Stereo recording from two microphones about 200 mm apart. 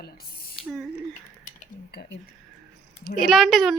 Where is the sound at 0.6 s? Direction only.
Centre (ahead or behind).